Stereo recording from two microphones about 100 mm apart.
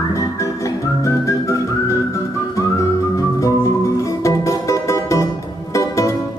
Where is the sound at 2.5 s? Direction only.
35° left (ahead or behind).